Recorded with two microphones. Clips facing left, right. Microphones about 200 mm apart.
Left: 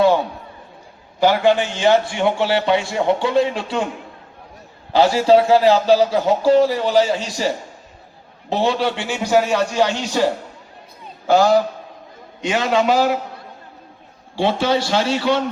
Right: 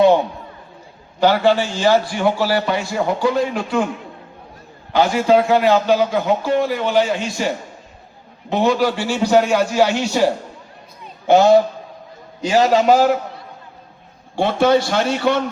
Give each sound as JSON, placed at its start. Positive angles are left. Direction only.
{"t": 1.2, "sound": "a man's voice", "side_deg": 15}
{"t": 4.9, "sound": "a man's voice", "side_deg": 30}
{"t": 9.5, "sound": "speech", "side_deg": -5}
{"t": 11.3, "sound": "a man's voice", "side_deg": -25}
{"t": 12.4, "sound": "a man's voice", "side_deg": -35}
{"t": 14.3, "sound": "a man's voice", "side_deg": -55}